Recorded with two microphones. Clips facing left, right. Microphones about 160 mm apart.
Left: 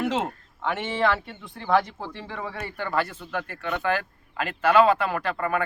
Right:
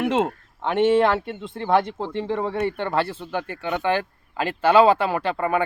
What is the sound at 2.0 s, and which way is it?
Speech, 20° right (ahead or behind).